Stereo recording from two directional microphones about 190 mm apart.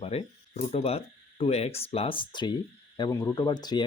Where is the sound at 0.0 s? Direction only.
30° left (ahead or behind).